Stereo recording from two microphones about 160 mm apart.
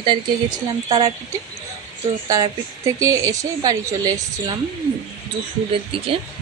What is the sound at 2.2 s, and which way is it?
A woman's voice, 20° right (ahead or behind).